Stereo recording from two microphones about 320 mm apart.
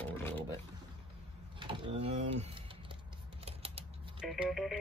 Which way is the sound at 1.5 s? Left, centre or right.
Centre.